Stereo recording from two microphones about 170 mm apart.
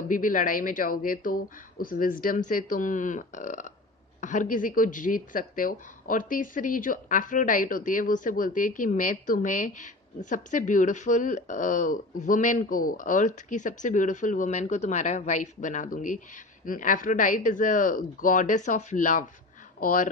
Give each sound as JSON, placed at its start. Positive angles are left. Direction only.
{"t": 0.1, "sound": "speech", "side_deg": 50}